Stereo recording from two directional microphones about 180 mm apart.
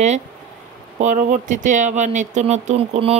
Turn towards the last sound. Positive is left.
turn(degrees=-35)  # may be behind; listen again after turning